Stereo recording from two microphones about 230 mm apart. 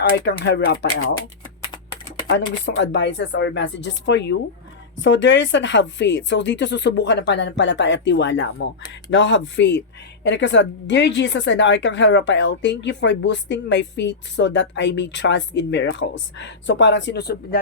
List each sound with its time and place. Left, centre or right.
0.1 s a woman's voice: left
2.3 s a woman's voice: left